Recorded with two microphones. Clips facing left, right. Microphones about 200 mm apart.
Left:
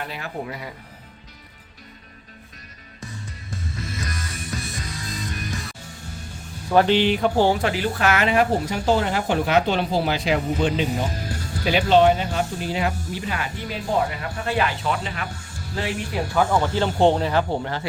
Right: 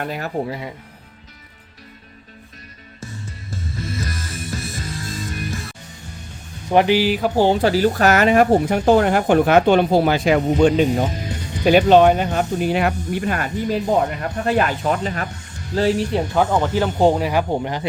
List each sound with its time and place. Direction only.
0.0 s speech: 45° right (ahead or behind)
0.4 s speech: 25° right (ahead or behind)
3.5 s music: centre (ahead or behind)
6.7 s speech: 15° right (ahead or behind)
7.6 s speech: 40° right (ahead or behind)
15.3 s a sound: 10° left (ahead or behind)
15.7 s speech: 40° right (ahead or behind)
16.1 s speech: 20° right (ahead or behind)
17.0 s speech: 5° right (ahead or behind)